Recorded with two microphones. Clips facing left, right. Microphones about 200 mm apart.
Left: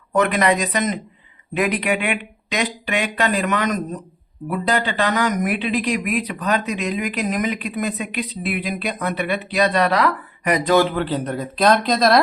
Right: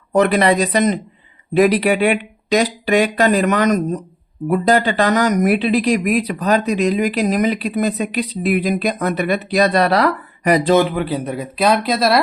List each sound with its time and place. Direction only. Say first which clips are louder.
0.1 s speech: right 4 dB; 35° right (ahead or behind)
10.8 s speech: right 2 dB; 15° right (ahead or behind)